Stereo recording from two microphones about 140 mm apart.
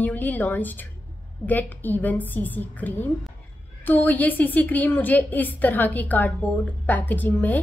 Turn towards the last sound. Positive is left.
turn(degrees=10)  # may be behind; listen again after turning